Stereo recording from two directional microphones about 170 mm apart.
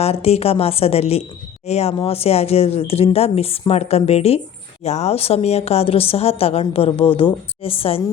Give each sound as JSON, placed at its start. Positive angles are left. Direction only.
{"t": 0.0, "sound": "a woman's voice", "side_deg": 35}